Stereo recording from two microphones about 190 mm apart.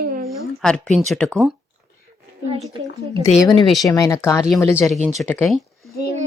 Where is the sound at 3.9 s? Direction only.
15° left (ahead or behind).